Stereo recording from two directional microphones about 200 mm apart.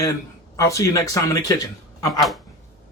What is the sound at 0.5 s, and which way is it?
Speech, 15° left (ahead or behind).